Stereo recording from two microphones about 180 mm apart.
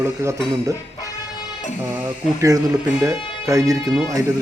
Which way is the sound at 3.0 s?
15° right (ahead or behind).